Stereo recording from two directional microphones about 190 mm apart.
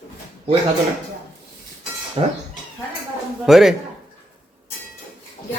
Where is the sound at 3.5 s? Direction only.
Centre (ahead or behind).